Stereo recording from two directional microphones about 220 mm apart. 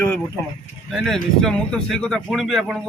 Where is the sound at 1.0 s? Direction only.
Centre (ahead or behind).